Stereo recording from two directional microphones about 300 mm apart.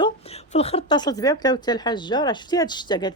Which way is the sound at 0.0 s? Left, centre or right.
Centre.